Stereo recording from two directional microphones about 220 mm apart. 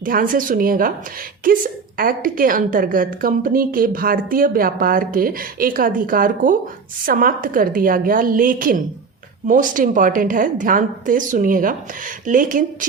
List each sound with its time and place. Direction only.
0.0 s a woman's voice: 40° right (ahead or behind)
2.0 s a woman's voice: 40° right (ahead or behind)